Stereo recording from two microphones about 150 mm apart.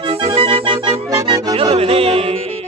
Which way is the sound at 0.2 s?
35° right (ahead or behind).